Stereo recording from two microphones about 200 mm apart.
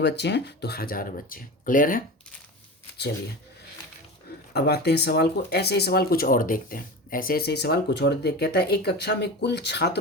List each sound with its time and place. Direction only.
0.0 s speech: 60° left (ahead or behind)
4.5 s speech: 55° left (ahead or behind)